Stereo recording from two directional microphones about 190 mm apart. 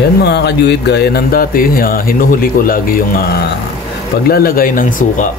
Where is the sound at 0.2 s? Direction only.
60° left (ahead or behind).